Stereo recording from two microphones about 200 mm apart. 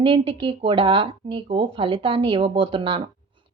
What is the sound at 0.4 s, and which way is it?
Speech, 25° right (ahead or behind).